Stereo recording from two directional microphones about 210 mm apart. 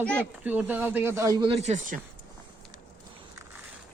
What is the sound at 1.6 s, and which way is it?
Speech, 35° right (ahead or behind).